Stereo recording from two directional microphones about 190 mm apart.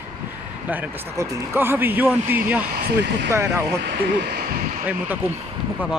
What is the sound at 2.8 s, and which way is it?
Speech, 60° right (ahead or behind).